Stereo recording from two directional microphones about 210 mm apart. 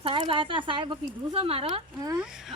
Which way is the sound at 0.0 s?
25° right (ahead or behind).